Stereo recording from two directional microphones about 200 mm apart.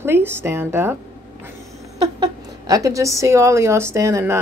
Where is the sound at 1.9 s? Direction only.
20° right (ahead or behind).